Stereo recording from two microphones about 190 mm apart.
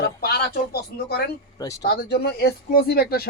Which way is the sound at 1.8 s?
55° left (ahead or behind).